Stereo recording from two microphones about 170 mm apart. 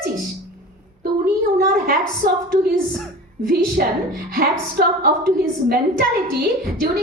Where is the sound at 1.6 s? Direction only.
60° right (ahead or behind).